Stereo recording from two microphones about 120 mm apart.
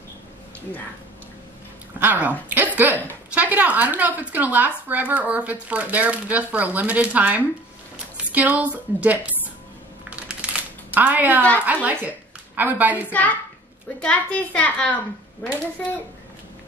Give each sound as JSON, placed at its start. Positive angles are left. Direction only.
{"t": 2.0, "sound": "a woman's voice", "side_deg": -15}
{"t": 10.0, "sound": "computer keyboard", "side_deg": -10}
{"t": 11.0, "sound": "a woman's voice", "side_deg": -15}
{"t": 13.0, "sound": "a woman's voice", "side_deg": 15}